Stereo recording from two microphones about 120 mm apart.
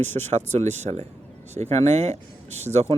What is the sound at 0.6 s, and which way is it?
Speech, 70° right (ahead or behind).